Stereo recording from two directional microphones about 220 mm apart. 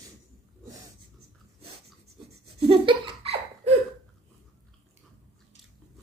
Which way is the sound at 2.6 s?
25° right (ahead or behind).